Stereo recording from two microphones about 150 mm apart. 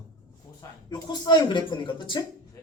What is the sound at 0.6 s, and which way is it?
Speech, 25° left (ahead or behind).